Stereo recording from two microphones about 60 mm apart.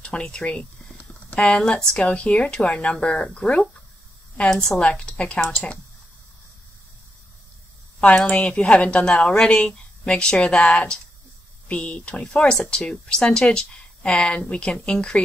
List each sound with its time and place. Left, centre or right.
0.0 s a woman's voice: centre
4.6 s a woman's voice: centre
8.0 s a woman's voice: left